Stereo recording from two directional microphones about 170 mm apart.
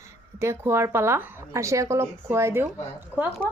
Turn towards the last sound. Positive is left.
turn(degrees=-10)  # may be behind; listen again after turning